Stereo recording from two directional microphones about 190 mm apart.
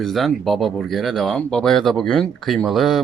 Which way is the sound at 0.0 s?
Centre (ahead or behind).